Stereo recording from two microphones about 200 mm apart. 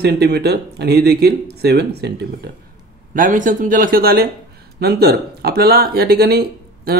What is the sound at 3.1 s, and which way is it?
Speech, 40° right (ahead or behind).